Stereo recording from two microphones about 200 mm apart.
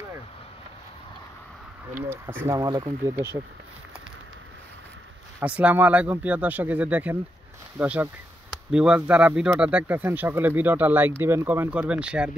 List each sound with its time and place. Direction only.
2.2 s speech: 15° right (ahead or behind)
5.4 s speech: 5° right (ahead or behind)